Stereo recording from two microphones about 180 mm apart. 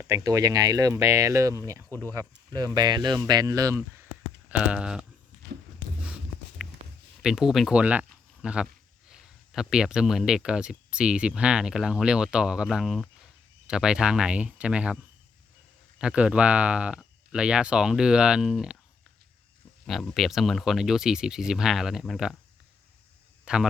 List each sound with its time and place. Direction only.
0.0 s speech: 15° right (ahead or behind)
1.9 s speech: 10° left (ahead or behind)
2.1 s speech: 20° right (ahead or behind)
4.4 s speech: 5° right (ahead or behind)
6.6 s a sound: 5° right (ahead or behind)
7.2 s speech: 5° right (ahead or behind)
16.0 s speech: 5° right (ahead or behind)
19.9 s speech: centre (ahead or behind)
23.5 s speech: 5° right (ahead or behind)